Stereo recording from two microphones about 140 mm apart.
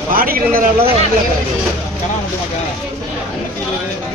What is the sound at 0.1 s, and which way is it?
Speech, 90° right.